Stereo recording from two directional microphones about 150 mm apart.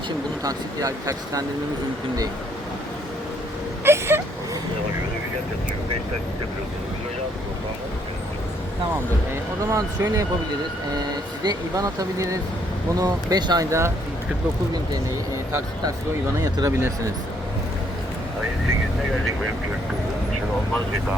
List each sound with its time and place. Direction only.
0.4 s speech: 25° right (ahead or behind)
3.8 s vehicle: 15° right (ahead or behind)
9.6 s speech: 20° right (ahead or behind)
16.4 s speech: 20° right (ahead or behind)